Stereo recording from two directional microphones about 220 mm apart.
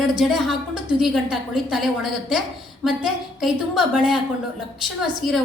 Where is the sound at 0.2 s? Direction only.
Centre (ahead or behind).